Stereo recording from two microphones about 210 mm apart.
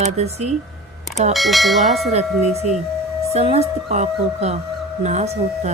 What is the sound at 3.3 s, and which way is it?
Speech, 30° right (ahead or behind).